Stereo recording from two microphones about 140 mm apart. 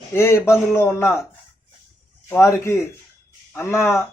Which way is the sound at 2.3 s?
20° left (ahead or behind).